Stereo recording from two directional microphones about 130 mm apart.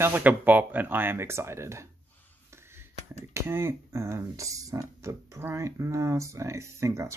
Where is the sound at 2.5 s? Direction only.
20° right (ahead or behind).